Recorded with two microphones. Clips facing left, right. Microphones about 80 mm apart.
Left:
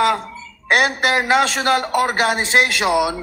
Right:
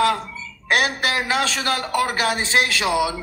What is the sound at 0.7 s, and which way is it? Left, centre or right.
A man's voice, left.